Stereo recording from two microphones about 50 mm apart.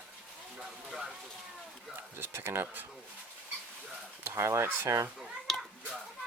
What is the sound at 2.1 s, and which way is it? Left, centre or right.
Speech, right.